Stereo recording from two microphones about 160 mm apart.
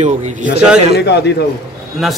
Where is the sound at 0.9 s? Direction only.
90° left.